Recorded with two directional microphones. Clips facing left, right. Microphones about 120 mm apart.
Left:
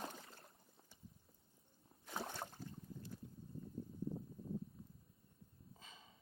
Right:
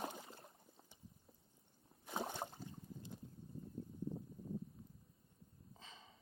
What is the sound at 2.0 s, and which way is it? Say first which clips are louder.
Boat: right 3 dB; 15° right (ahead or behind).